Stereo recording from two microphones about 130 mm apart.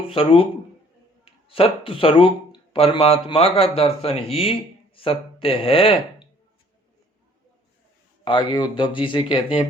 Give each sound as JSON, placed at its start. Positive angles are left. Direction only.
{"t": 0.1, "sound": "speech", "side_deg": 45}
{"t": 8.2, "sound": "speech", "side_deg": 40}